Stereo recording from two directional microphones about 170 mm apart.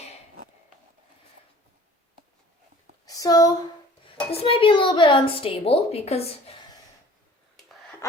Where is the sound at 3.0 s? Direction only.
20° left (ahead or behind).